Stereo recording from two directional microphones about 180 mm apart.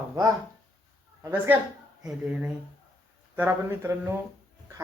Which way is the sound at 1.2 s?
10° right (ahead or behind).